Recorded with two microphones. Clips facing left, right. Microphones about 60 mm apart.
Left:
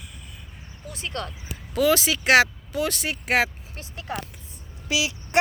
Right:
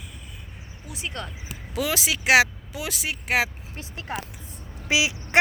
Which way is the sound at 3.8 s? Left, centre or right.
Right.